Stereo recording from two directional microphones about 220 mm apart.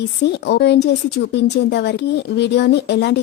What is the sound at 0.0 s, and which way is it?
Speech, 50° left (ahead or behind).